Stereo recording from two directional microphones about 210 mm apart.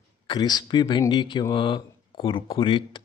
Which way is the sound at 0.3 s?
20° left (ahead or behind).